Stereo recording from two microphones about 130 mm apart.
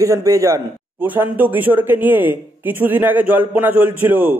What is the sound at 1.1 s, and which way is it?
Speech, 15° right (ahead or behind).